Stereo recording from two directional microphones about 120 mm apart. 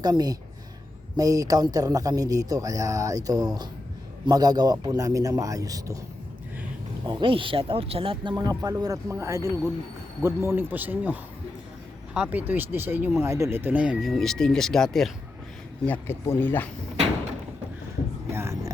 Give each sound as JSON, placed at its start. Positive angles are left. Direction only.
{"t": 0.0, "sound": "a man's voice", "side_deg": -35}
{"t": 7.1, "sound": "speech", "side_deg": -45}
{"t": 15.9, "sound": "speech", "side_deg": 20}
{"t": 18.3, "sound": "a sound", "side_deg": -20}